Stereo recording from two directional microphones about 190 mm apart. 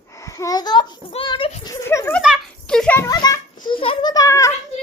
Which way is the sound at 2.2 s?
Centre (ahead or behind).